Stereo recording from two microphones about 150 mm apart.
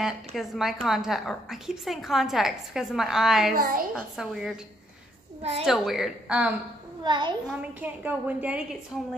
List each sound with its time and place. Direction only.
0.0 s a woman's voice: centre (ahead or behind)
5.4 s a woman's voice: 45° right (ahead or behind)
5.7 s a woman's voice: centre (ahead or behind)
7.0 s a child's voice: 30° right (ahead or behind)
7.4 s a woman's voice: 10° right (ahead or behind)